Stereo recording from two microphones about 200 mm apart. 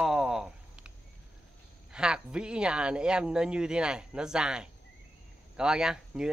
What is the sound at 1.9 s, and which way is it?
A man's voice, 5° right (ahead or behind).